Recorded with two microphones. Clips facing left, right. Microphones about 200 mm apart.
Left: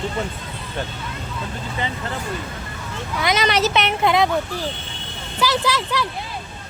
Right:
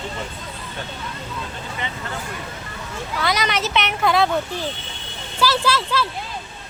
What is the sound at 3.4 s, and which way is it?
Speech, 35° left (ahead or behind).